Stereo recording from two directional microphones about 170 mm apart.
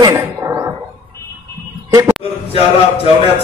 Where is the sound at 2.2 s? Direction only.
35° left (ahead or behind).